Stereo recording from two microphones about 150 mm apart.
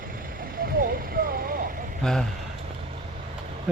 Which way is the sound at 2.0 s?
5° left (ahead or behind).